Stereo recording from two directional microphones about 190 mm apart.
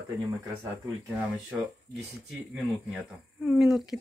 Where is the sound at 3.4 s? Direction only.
Centre (ahead or behind).